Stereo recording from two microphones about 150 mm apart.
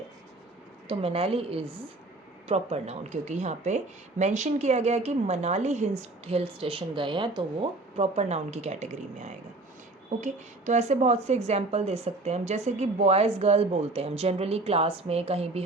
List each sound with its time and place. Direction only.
0.9 s a woman's voice: 40° right (ahead or behind)